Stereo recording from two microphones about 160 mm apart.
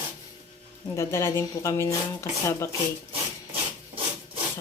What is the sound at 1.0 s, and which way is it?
Speech, 15° left (ahead or behind).